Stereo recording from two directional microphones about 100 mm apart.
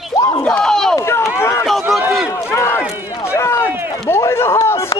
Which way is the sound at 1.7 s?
Centre (ahead or behind).